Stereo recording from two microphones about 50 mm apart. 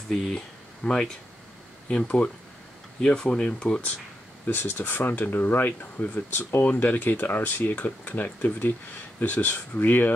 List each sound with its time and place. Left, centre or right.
0.8 s speech: centre
2.0 s speech: left
3.0 s speech: centre
3.6 s speech: left
4.6 s speech: left